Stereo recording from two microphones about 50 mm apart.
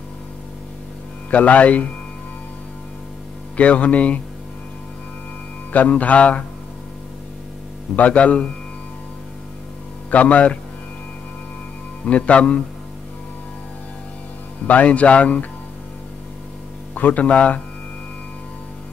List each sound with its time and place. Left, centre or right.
1.3 s a man's voice: left
3.5 s a man's voice: left
5.7 s music: left
7.9 s a man's voice: left
10.1 s a man's voice: left
12.0 s a man's voice: left
14.7 s a man's voice: left
16.9 s a man's voice: left